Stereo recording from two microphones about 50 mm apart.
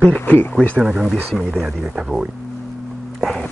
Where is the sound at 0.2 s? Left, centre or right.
Left.